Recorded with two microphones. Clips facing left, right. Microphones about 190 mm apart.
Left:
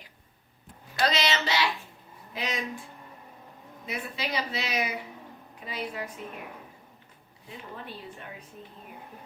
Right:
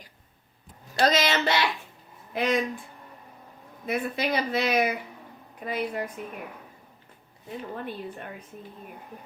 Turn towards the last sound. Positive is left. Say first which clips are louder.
# right 7 dB
turn(degrees=-50)  # may be behind; listen again after turning